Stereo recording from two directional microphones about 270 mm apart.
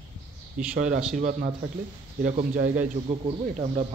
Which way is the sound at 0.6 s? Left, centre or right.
Right.